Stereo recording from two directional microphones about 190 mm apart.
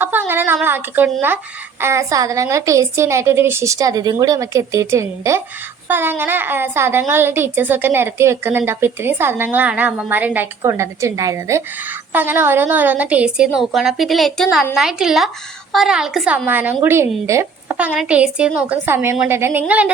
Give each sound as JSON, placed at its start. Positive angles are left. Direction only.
{"t": 0.0, "sound": "a woman's voice", "side_deg": -10}